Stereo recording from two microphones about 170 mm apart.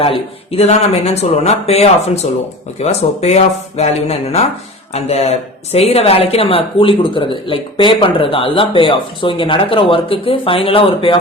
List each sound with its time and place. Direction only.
0.0 s speech: 35° left (ahead or behind)